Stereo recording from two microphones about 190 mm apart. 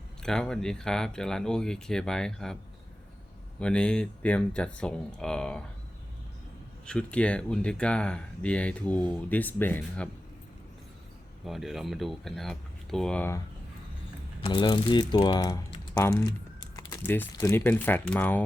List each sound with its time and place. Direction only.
0.2 s speech: 5° left (ahead or behind)
3.6 s speech: 5° left (ahead or behind)
6.8 s speech: 5° left (ahead or behind)
11.4 s speech: centre (ahead or behind)
14.4 s speech: 25° left (ahead or behind); by 18.4 s 10° left (ahead or behind)